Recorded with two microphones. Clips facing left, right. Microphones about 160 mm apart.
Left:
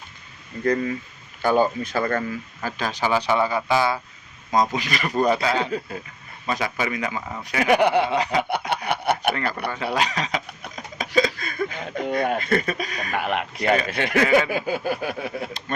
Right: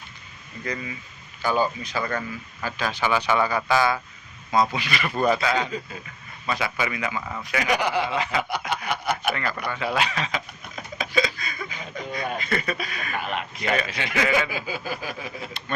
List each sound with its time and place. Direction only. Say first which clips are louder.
0.6 s speech: left 10 dB; 50° left (ahead or behind); by 4.0 s 25° left (ahead or behind)
4.5 s speech: left 1 dB; 40° left (ahead or behind)
7.6 s a sound: left 7 dB; 55° left (ahead or behind)
8.2 s speech: left 4 dB; 35° left (ahead or behind)
8.9 s a sound: left 4 dB; 60° left (ahead or behind)
9.3 s speech: left 2 dB; 35° left (ahead or behind)
13.1 s speech: left 5 dB; 65° left (ahead or behind)
13.8 s speech: left 5 dB; 50° left (ahead or behind)
14.3 s a sound: left 6 dB; 55° left (ahead or behind)